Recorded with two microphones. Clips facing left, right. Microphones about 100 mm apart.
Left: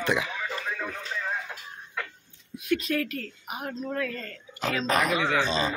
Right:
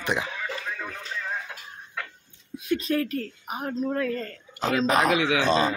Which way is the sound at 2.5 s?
30° right (ahead or behind).